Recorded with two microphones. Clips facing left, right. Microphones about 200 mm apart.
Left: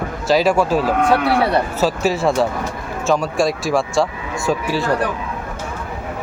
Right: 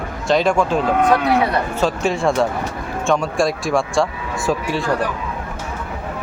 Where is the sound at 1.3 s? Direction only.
30° left (ahead or behind).